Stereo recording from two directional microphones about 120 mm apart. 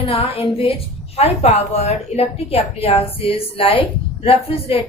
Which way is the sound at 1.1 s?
60° left (ahead or behind).